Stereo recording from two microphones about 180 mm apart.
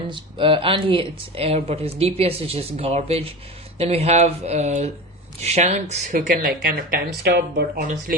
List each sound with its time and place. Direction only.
0.1 s speech: 30° right (ahead or behind)
6.7 s speech: 55° right (ahead or behind)